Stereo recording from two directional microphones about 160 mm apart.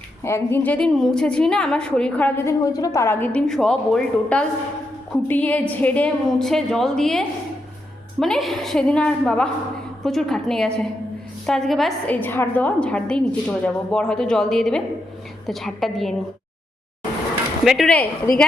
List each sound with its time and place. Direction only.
0.2 s a woman's voice: 15° left (ahead or behind)
17.7 s a woman's voice: 5° left (ahead or behind)